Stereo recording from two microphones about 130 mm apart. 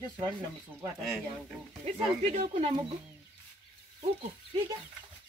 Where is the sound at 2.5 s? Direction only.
45° right (ahead or behind).